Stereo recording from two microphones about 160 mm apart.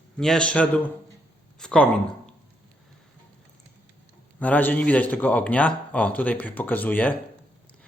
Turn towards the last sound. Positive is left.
turn(degrees=10)  # may be behind; listen again after turning